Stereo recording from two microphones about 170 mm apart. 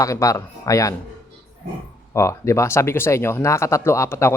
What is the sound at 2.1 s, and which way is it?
Speech, 15° left (ahead or behind).